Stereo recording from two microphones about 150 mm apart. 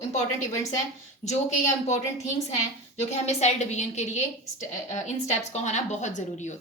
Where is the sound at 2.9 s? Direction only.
50° left (ahead or behind).